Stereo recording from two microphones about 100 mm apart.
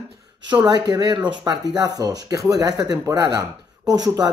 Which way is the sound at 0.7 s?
40° right (ahead or behind).